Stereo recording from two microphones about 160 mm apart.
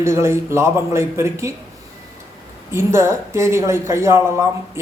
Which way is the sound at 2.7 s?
15° right (ahead or behind).